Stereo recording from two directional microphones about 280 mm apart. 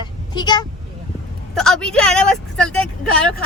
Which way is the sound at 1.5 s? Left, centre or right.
Centre.